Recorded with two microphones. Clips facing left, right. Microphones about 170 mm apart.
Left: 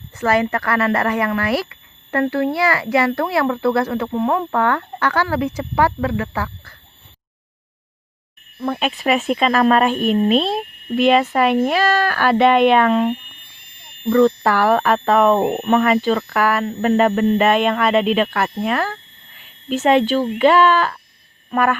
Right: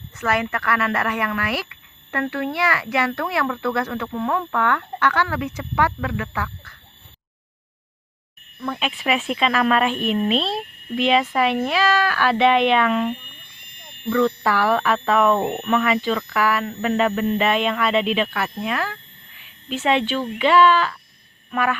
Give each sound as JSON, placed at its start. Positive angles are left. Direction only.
{"t": 0.2, "sound": "speech", "side_deg": 35}
{"t": 8.5, "sound": "speech", "side_deg": 40}
{"t": 14.1, "sound": "speech", "side_deg": 40}
{"t": 21.5, "sound": "frog", "side_deg": 45}